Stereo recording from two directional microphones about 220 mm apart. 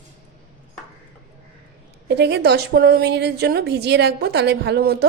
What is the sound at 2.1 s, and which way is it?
A woman's voice, 50° right (ahead or behind).